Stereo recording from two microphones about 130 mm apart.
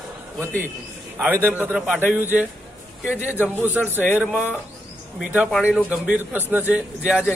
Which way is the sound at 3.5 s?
15° right (ahead or behind).